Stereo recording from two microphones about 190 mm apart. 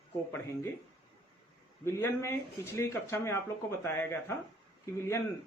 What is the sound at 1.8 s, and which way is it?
Speech, 15° left (ahead or behind).